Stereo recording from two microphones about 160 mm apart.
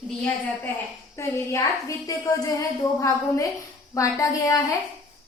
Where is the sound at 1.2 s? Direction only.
15° left (ahead or behind).